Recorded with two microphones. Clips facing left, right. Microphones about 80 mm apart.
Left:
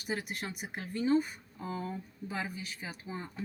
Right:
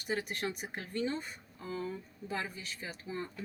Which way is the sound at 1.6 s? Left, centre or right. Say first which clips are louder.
Left 1 dB; left.